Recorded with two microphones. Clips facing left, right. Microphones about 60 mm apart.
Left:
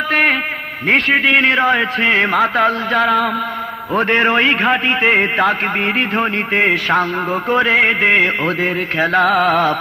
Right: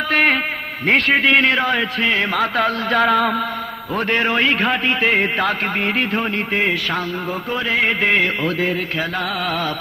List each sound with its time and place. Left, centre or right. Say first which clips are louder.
0.1 s a sound: left 1 dB; centre
0.9 s a man's voice: left 2 dB; centre
1.5 s a man's voice: left 4 dB; left
2.9 s a sound: left 1 dB; centre
3.9 s a man's voice: left 5 dB; left
6.1 s music: left 4 dB; left
7.9 s music: left 4 dB; left